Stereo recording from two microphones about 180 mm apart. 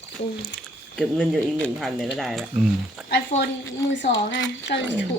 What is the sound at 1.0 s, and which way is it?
Speech, 5° left (ahead or behind).